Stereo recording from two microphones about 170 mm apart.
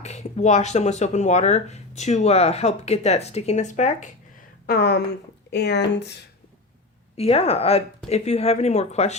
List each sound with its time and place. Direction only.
0.0 s speech: 40° left (ahead or behind)
4.6 s speech: 70° left (ahead or behind)
5.5 s speech: 90° left
7.2 s speech: 35° left (ahead or behind)